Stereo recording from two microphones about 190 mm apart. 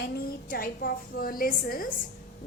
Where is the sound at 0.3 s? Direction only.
50° left (ahead or behind).